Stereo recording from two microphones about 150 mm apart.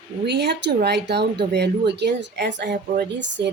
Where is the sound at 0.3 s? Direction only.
90° right.